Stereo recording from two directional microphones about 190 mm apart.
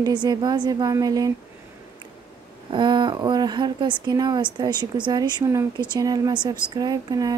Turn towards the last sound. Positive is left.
turn(degrees=-20)  # may be behind; listen again after turning